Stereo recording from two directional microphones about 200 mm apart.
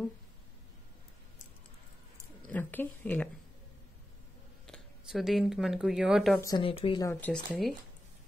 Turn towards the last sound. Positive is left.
turn(degrees=5)  # may be behind; listen again after turning